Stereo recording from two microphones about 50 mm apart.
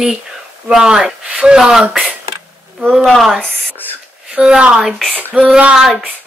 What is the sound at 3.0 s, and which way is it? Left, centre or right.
Speech, centre.